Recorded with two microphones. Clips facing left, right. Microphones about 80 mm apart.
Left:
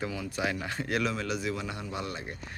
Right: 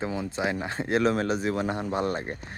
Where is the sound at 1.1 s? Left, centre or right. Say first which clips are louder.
Right 6 dB; right.